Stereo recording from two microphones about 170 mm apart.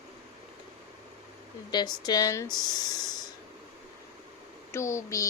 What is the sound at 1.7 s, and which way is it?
Speech, 25° left (ahead or behind).